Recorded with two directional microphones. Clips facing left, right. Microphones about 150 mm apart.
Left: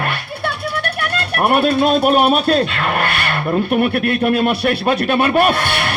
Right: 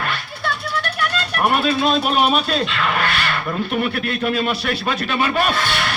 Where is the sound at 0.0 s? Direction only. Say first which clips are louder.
Left 3 dB; 60° left (ahead or behind).